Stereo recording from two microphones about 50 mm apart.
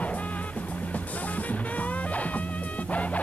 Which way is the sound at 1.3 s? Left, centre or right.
Left.